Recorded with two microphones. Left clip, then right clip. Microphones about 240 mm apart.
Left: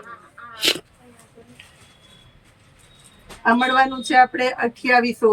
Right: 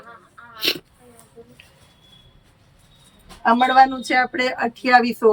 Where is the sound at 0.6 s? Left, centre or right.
Centre.